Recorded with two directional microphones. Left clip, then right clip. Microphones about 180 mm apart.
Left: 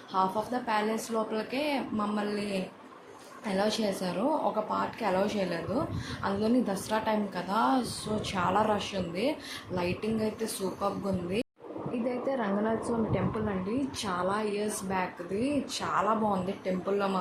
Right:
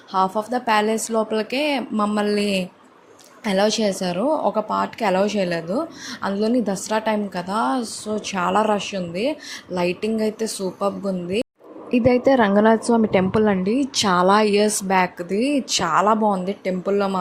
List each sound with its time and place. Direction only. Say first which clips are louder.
0.1 s a woman's voice: right 8 dB; 45° right (ahead or behind)
11.9 s a woman's voice: right 15 dB; 55° right (ahead or behind); by 17.1 s 40° right (ahead or behind)